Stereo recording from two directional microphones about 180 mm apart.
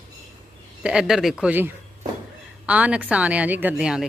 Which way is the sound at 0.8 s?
5° right (ahead or behind).